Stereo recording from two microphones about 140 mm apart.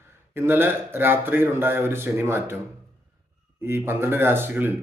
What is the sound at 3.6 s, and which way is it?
A man's voice, 15° right (ahead or behind).